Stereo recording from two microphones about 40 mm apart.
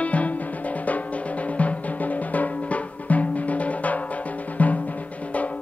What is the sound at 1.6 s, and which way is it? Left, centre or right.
Music, left.